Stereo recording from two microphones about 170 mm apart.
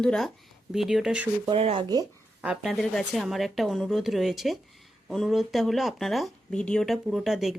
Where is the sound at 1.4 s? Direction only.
35° right (ahead or behind).